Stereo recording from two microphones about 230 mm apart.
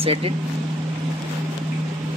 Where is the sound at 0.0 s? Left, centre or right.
Right.